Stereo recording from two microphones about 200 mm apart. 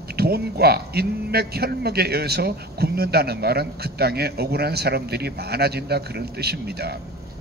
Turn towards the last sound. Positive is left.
turn(degrees=-55)  # may be behind; listen again after turning